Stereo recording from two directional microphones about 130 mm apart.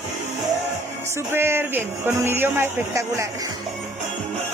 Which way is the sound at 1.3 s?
15° right (ahead or behind).